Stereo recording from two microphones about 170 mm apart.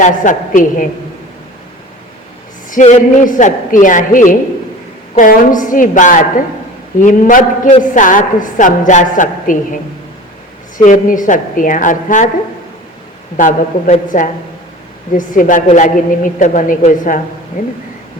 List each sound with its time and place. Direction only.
0.0 s a woman's voice: 50° left (ahead or behind)
2.6 s a woman's voice: 45° left (ahead or behind)
10.8 s a woman's voice: 50° left (ahead or behind)
13.3 s a woman's voice: 45° left (ahead or behind)